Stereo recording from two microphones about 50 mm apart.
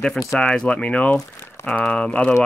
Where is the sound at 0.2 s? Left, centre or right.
Centre.